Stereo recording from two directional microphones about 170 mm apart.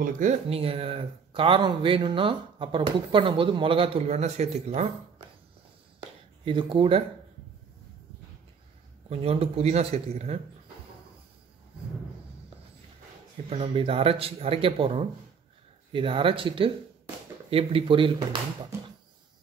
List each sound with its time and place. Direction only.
0.0 s speech: 45° right (ahead or behind)
6.4 s speech: 30° right (ahead or behind)
9.1 s speech: 35° right (ahead or behind)
13.5 s speech: 35° right (ahead or behind)